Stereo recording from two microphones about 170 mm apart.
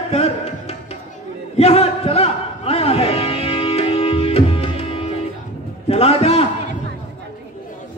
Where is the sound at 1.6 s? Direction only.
35° left (ahead or behind).